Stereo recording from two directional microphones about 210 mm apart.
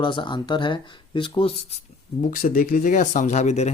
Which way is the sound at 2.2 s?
40° left (ahead or behind).